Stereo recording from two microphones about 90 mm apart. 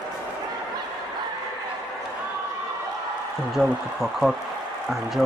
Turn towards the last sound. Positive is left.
turn(degrees=-5)  # may be behind; listen again after turning